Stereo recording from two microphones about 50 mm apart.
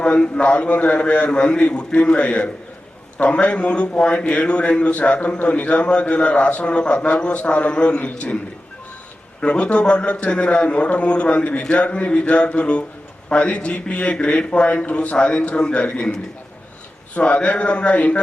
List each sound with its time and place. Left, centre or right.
0.0 s a man's voice: centre
9.4 s a man's voice: left
17.2 s a man's voice: left